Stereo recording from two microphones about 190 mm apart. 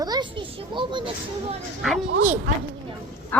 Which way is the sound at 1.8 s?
Centre (ahead or behind).